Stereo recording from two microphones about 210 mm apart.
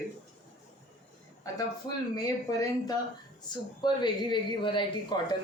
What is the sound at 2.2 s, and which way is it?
Speech, 20° left (ahead or behind).